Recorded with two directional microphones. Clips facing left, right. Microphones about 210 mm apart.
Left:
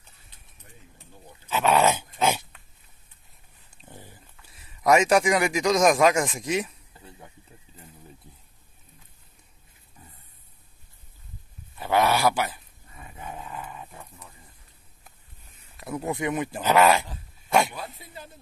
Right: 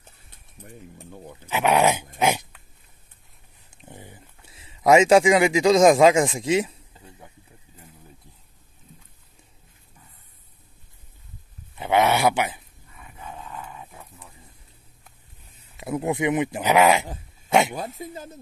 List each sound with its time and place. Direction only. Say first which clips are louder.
0.6 s speech: right 11 dB; 55° right (ahead or behind)
1.5 s dog: right 1 dB; 15° right (ahead or behind)
3.7 s a sound: right 3 dB; 20° right (ahead or behind)
11.7 s speech: right 2 dB; 20° right (ahead or behind)
13.2 s dog: left 1 dB; 10° left (ahead or behind)
15.8 s speech: right 5 dB; 20° right (ahead or behind)
17.5 s a sound: right 3 dB; 20° right (ahead or behind)
17.7 s speech: right 7 dB; 45° right (ahead or behind)